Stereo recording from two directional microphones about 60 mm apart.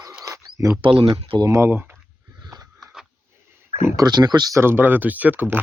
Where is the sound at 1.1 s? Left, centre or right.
Right.